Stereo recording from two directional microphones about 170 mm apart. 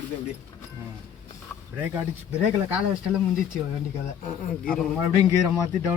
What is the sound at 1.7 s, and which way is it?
Speech, 10° right (ahead or behind).